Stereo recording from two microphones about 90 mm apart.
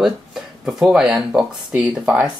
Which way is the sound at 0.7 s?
5° right (ahead or behind).